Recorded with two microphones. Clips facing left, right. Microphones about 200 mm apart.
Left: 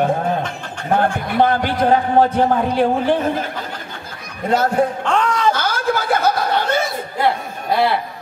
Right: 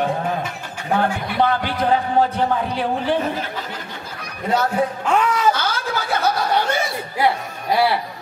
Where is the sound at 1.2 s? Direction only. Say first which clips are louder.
Left 3 dB; 45° left (ahead or behind).